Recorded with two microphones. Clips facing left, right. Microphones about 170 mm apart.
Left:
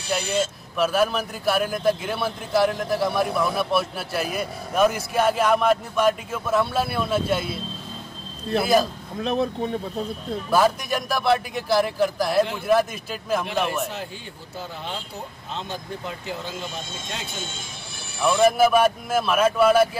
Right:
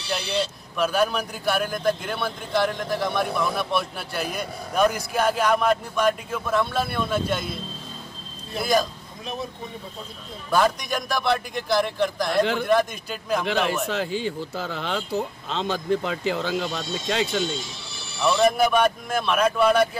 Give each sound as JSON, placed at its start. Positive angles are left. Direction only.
{"t": 0.2, "sound": "speech", "side_deg": 45}
{"t": 0.7, "sound": "a man's voice", "side_deg": 0}
{"t": 9.2, "sound": "speech", "side_deg": 65}
{"t": 10.5, "sound": "a man's voice", "side_deg": 5}
{"t": 13.5, "sound": "speech", "side_deg": -90}
{"t": 17.6, "sound": "music", "side_deg": 50}
{"t": 18.4, "sound": "a man's voice", "side_deg": 5}